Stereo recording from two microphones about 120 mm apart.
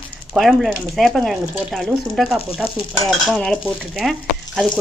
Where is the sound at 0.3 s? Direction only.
Centre (ahead or behind).